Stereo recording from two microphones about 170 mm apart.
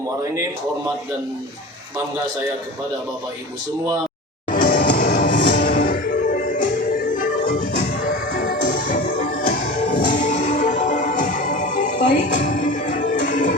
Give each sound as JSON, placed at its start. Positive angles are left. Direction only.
{"t": 4.6, "sound": "music", "side_deg": 55}